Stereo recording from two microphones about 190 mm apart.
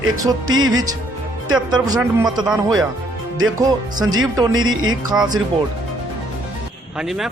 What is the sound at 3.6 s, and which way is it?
Speech, 20° right (ahead or behind).